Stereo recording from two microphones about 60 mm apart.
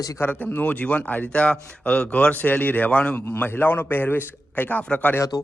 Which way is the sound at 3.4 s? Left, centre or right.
Left.